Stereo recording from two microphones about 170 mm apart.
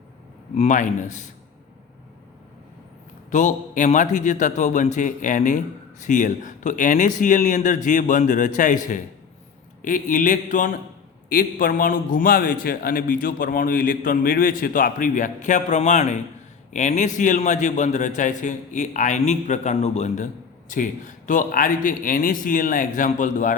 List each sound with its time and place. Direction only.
0.5 s a man's voice: 45° left (ahead or behind)
3.3 s a man's voice: 45° left (ahead or behind)